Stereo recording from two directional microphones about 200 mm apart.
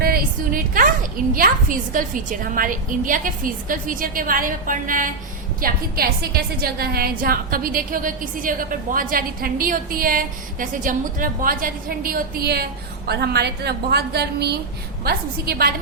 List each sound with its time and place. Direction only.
0.0 s a woman's voice: 45° right (ahead or behind)